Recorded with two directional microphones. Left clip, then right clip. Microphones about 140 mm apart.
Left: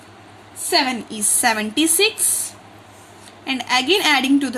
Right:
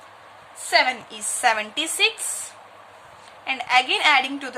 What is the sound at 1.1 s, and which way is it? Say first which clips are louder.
A woman's voice: left 2 dB; 20° left (ahead or behind).